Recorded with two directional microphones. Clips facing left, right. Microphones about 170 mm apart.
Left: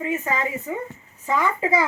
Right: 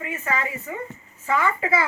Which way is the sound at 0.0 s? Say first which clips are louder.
Left 3 dB; 20° left (ahead or behind).